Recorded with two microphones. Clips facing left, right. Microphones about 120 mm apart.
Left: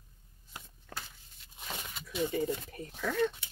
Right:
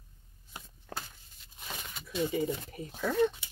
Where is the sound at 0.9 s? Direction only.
30° right (ahead or behind).